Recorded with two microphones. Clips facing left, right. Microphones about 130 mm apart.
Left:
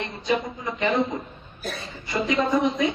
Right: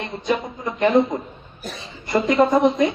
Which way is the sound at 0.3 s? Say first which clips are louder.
Right 2 dB; 55° right (ahead or behind).